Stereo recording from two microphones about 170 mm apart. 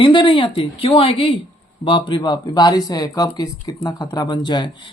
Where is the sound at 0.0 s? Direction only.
30° left (ahead or behind).